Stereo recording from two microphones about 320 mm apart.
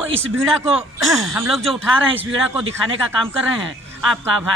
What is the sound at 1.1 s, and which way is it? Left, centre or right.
Speech, centre.